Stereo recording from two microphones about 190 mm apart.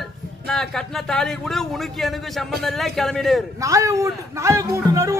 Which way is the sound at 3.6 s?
15° right (ahead or behind).